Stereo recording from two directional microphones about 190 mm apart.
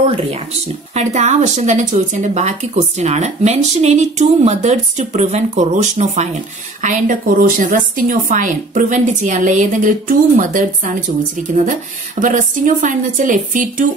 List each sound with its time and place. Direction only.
0.9 s a woman's voice: 35° right (ahead or behind)